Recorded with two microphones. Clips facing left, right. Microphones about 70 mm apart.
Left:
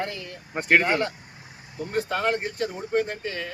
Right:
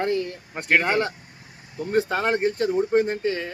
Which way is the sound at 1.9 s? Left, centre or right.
Right.